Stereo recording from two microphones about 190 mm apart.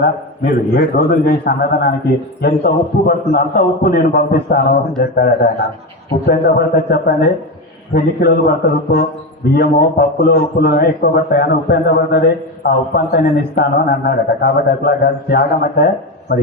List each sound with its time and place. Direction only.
0.0 s a man's voice: 55° left (ahead or behind)